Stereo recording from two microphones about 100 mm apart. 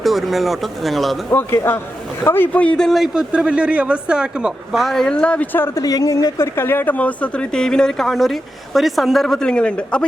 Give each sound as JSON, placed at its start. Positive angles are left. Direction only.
{"t": 0.0, "sound": "a man's voice", "side_deg": 0}
{"t": 1.3, "sound": "a man's voice", "side_deg": 25}
{"t": 5.8, "sound": "a woman's voice", "side_deg": 35}